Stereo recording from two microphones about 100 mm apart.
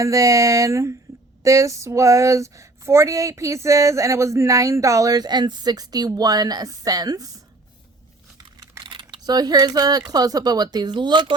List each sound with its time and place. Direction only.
0.0 s speech: 35° right (ahead or behind)
8.8 s typing: 55° right (ahead or behind)
10.1 s speech: 40° right (ahead or behind)